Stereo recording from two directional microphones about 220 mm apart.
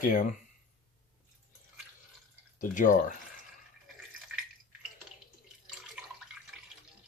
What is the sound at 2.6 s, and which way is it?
Speech, 35° left (ahead or behind).